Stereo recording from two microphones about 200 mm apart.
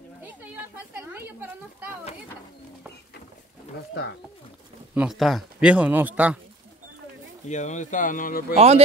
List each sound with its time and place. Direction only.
0.2 s speech: 10° right (ahead or behind)
4.9 s speech: centre (ahead or behind)
7.4 s speech: 35° left (ahead or behind)
8.5 s a man's voice: 30° right (ahead or behind)